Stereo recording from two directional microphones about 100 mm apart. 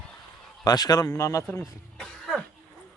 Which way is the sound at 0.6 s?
40° left (ahead or behind).